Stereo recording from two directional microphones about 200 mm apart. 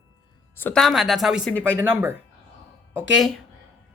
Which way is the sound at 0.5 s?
5° left (ahead or behind).